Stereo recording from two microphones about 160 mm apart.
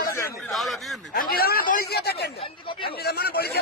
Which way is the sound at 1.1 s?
65° left (ahead or behind).